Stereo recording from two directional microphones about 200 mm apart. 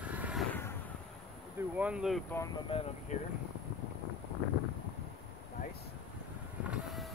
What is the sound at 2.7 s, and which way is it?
Speech, 30° left (ahead or behind).